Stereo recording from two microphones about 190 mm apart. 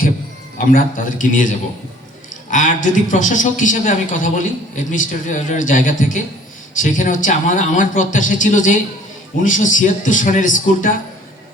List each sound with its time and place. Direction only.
0.7 s a man's voice: 45° left (ahead or behind)